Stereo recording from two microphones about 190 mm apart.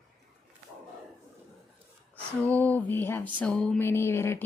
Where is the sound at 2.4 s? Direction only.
10° left (ahead or behind).